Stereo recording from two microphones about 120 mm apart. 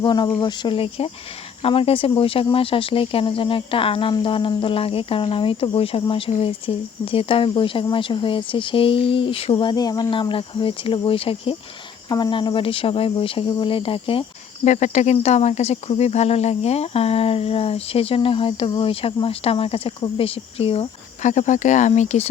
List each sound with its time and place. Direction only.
0.0 s speech: 35° left (ahead or behind)
12.0 s speech: 35° left (ahead or behind)
14.6 s speech: 85° left; by 20.8 s 55° left (ahead or behind)
21.2 s speech: 90° left